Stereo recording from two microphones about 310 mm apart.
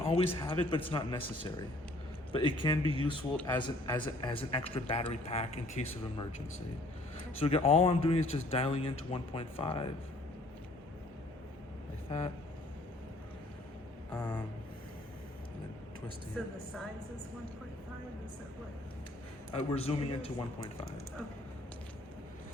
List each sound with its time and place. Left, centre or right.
0.0 s a sound: centre
0.3 s a man's voice: centre
2.3 s a man's voice: centre
7.3 s a man's voice: centre
14.1 s a man's voice: centre
19.5 s a man's voice: centre